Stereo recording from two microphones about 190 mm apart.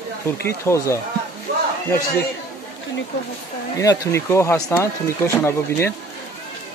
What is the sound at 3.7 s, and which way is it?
Speech, 15° left (ahead or behind).